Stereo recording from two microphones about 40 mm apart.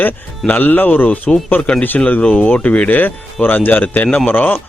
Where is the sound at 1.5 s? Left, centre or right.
Left.